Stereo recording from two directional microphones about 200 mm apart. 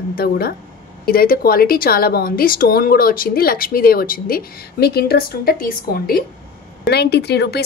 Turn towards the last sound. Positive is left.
turn(degrees=55)  # may be behind; listen again after turning